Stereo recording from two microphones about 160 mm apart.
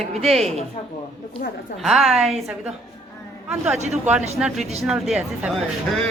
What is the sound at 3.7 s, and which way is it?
Speech, 45° right (ahead or behind).